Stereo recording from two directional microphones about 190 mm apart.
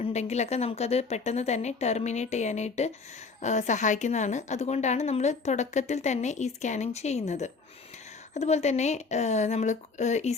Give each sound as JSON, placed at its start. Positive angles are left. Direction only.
{"t": 0.0, "sound": "a woman's voice", "side_deg": 35}